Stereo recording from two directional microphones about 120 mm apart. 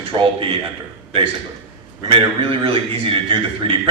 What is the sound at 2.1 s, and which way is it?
A man's voice, 50° right (ahead or behind).